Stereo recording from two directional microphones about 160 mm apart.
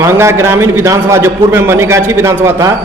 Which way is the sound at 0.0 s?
15° right (ahead or behind).